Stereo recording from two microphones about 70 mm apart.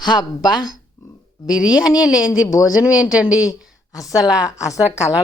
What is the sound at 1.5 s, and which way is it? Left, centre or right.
Speech, left.